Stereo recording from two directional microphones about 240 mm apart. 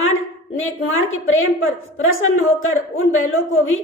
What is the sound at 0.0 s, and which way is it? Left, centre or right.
A woman's voice, left.